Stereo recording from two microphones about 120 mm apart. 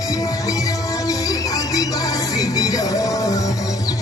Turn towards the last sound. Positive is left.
turn(degrees=30)  # may be behind; listen again after turning